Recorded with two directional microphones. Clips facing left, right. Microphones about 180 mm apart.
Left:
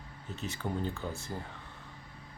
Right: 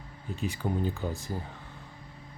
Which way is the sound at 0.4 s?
15° right (ahead or behind).